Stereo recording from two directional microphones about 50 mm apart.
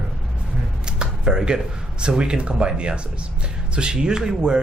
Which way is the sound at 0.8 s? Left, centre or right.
Centre.